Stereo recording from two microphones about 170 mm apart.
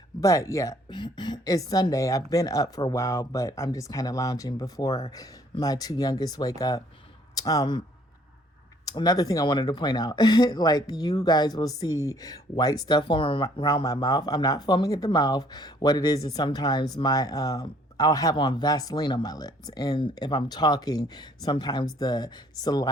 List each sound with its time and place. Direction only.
0.2 s speech: 20° left (ahead or behind)
8.8 s speech: 20° left (ahead or behind)